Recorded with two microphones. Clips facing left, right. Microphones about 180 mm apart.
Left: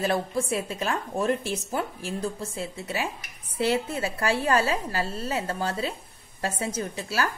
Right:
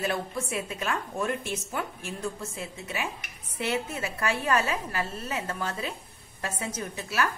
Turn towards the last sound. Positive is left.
turn(degrees=30)  # may be behind; listen again after turning